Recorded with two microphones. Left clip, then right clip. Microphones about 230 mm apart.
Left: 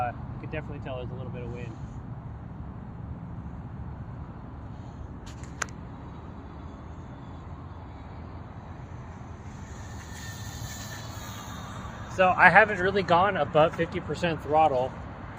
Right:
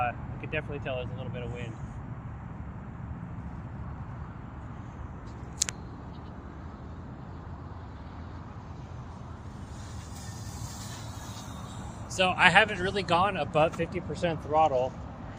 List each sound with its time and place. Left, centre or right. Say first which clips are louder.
0.0 s speech: right 1 dB; right
12.1 s speech: left 4 dB; centre; by 14.8 s left